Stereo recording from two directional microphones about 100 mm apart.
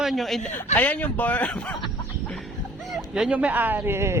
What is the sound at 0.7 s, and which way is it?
A man's voice, 15° left (ahead or behind).